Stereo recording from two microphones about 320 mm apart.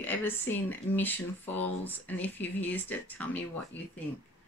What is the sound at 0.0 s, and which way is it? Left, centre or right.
Speech, centre.